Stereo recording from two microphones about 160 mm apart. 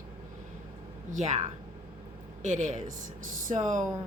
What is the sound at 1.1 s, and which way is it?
A woman's voice, 50° right (ahead or behind).